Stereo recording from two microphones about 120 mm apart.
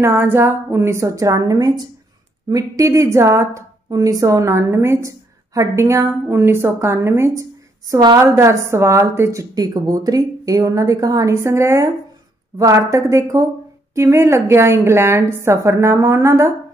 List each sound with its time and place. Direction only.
0.0 s a woman's voice: 20° right (ahead or behind)
7.9 s a woman's voice: 35° right (ahead or behind)
8.2 s a woman's voice: 25° right (ahead or behind)